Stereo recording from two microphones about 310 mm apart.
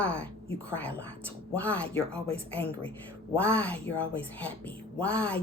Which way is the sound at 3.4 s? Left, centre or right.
Centre.